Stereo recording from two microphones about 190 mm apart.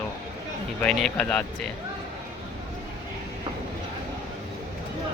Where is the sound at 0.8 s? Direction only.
5° left (ahead or behind).